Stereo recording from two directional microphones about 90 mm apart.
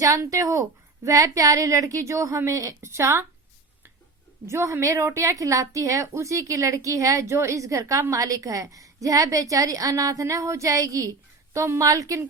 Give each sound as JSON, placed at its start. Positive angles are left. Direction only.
{"t": 0.0, "sound": "a woman's voice", "side_deg": -40}
{"t": 4.4, "sound": "a woman's voice", "side_deg": -30}